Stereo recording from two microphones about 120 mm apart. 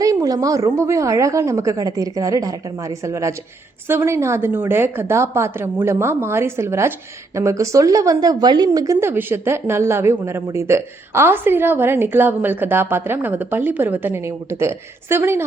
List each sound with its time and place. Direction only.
0.0 s speech: 30° right (ahead or behind)